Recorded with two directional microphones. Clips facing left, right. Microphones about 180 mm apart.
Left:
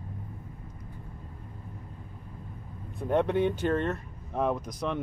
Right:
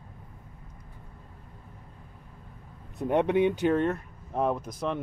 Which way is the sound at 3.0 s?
15° right (ahead or behind).